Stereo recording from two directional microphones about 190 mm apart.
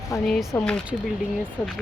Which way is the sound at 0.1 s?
15° left (ahead or behind).